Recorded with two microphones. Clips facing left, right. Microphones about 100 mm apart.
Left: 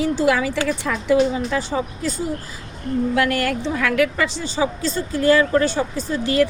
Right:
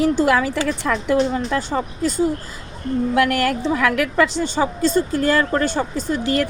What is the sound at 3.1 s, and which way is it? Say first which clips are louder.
A woman's voice: right 4 dB; 50° right (ahead or behind).